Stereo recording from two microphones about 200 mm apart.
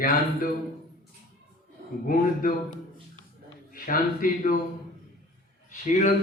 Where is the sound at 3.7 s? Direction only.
45° left (ahead or behind).